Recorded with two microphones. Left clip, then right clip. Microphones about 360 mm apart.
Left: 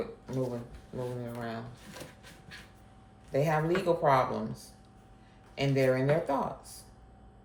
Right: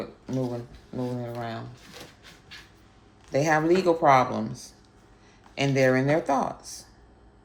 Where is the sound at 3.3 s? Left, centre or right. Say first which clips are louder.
Right 6 dB; right.